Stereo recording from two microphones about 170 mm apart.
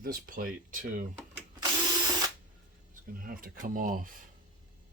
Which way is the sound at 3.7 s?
55° right (ahead or behind).